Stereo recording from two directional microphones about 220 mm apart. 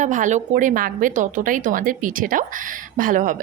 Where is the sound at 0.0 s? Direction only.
35° right (ahead or behind).